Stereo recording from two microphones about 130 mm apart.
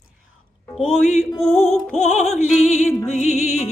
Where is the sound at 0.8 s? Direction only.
60° left (ahead or behind).